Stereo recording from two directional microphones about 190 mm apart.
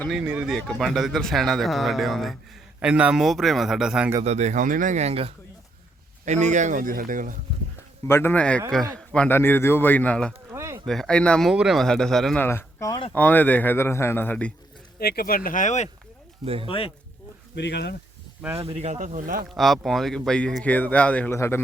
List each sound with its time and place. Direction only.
0.2 s speech: 5° right (ahead or behind)
4.2 s speech: 35° right (ahead or behind)
8.0 s a man's voice: 10° left (ahead or behind)
10.5 s a sound: 15° right (ahead or behind)
10.8 s speech: centre (ahead or behind); by 13.1 s 20° left (ahead or behind)
13.1 s a man's voice: 10° left (ahead or behind)
14.9 s speech: 55° left (ahead or behind)
16.6 s speech: 30° left (ahead or behind)
17.5 s speech: 65° left (ahead or behind)
18.6 s speech: 35° right (ahead or behind)
19.5 s speech: centre (ahead or behind)